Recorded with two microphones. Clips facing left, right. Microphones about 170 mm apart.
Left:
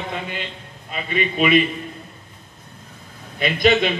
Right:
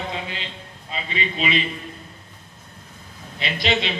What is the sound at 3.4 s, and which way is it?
Speech, 50° left (ahead or behind).